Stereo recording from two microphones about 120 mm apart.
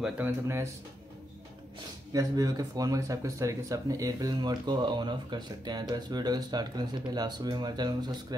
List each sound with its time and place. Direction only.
0.0 s speech: 20° right (ahead or behind)
2.1 s speech: 30° right (ahead or behind)